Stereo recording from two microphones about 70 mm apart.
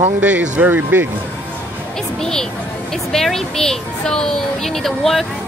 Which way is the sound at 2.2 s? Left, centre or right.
Centre.